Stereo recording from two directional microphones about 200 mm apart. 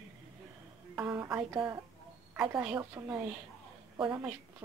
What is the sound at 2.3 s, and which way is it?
Speech, 5° right (ahead or behind).